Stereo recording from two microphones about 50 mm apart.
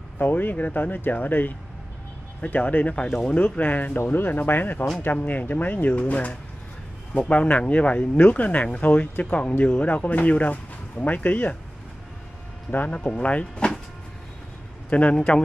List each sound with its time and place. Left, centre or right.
0.2 s speech: left
12.7 s speech: left
14.9 s speech: left